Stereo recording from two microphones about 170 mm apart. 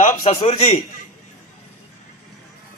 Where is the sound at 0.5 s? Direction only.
35° left (ahead or behind).